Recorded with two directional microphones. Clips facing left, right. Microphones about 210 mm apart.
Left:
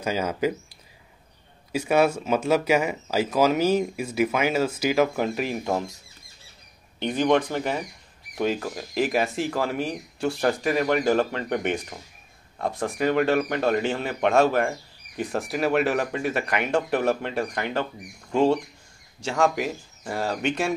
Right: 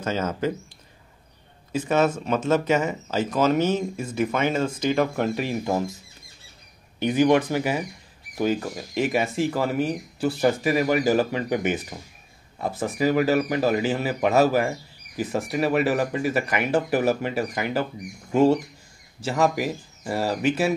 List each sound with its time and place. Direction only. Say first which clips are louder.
0.0 s speech: left 1 dB; 10° left (ahead or behind)
1.7 s speech: left 1 dB; 10° left (ahead or behind)
7.0 s speech: right 3 dB; 10° right (ahead or behind)